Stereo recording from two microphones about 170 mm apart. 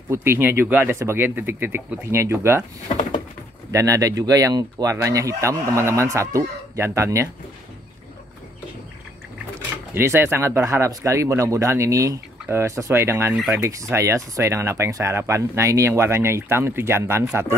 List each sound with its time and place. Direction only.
0.1 s speech: 15° right (ahead or behind)
3.7 s speech: 20° right (ahead or behind)
9.9 s speech: 15° right (ahead or behind)